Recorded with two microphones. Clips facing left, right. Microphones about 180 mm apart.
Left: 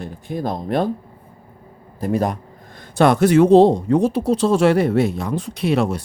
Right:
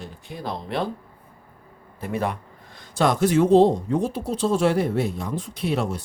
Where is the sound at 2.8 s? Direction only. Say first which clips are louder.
Left 6 dB; 60° left (ahead or behind).